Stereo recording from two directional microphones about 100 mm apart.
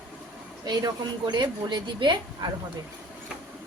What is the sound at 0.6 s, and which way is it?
A woman's voice, 45° right (ahead or behind).